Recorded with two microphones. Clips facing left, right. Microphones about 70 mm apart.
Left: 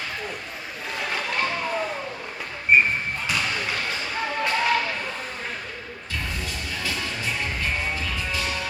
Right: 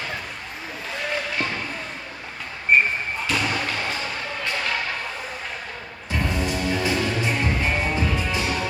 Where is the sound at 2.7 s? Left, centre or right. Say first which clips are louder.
Even; centre.